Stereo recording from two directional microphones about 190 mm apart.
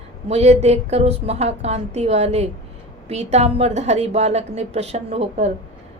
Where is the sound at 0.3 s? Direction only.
35° right (ahead or behind).